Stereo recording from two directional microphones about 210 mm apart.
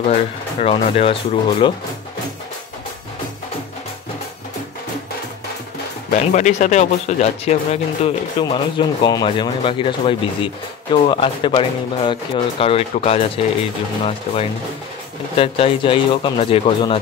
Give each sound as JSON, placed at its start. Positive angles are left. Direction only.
{"t": 0.6, "sound": "speech", "side_deg": 30}
{"t": 6.0, "sound": "speech", "side_deg": 35}